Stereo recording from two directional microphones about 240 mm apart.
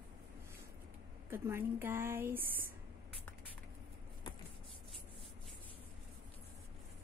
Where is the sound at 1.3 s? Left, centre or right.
Centre.